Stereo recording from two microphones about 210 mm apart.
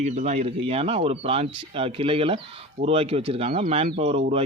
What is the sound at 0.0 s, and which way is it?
Speech, 35° right (ahead or behind).